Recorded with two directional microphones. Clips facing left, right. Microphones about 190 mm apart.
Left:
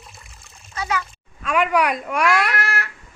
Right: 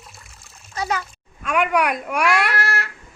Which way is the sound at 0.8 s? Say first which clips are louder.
Right 1 dB; 40° right (ahead or behind).